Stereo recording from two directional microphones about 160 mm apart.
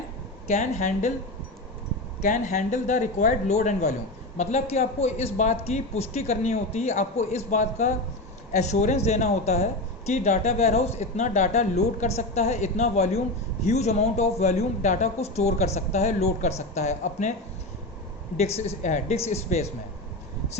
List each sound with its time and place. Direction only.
0.4 s a man's voice: 45° left (ahead or behind)
2.2 s a man's voice: 50° left (ahead or behind)
18.3 s a man's voice: 40° left (ahead or behind)